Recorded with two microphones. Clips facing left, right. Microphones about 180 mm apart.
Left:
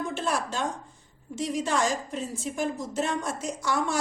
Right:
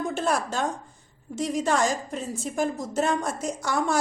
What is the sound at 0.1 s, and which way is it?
A woman's voice, 45° right (ahead or behind).